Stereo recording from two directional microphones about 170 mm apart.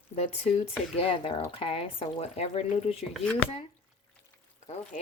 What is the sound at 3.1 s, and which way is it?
Speech, 5° left (ahead or behind).